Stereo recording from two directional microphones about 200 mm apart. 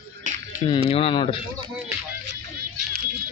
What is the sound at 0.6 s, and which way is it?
Speech, 25° left (ahead or behind).